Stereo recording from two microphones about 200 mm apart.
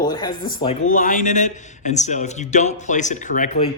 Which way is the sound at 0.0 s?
20° left (ahead or behind).